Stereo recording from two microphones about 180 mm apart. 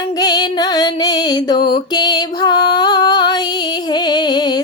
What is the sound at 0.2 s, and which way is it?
Music, 20° left (ahead or behind).